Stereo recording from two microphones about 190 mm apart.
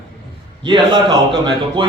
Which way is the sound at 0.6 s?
25° right (ahead or behind).